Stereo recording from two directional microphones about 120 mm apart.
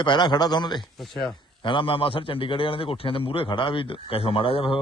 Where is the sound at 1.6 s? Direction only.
45° left (ahead or behind).